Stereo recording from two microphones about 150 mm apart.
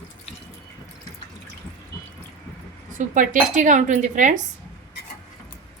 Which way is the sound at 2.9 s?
60° right (ahead or behind).